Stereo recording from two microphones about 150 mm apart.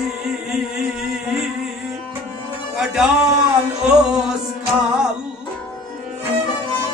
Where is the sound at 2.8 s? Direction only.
5° right (ahead or behind).